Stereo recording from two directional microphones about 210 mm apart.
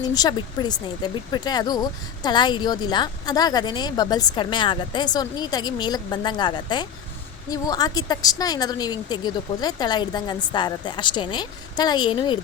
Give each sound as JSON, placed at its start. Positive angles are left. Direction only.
{"t": 0.1, "sound": "speech", "side_deg": 20}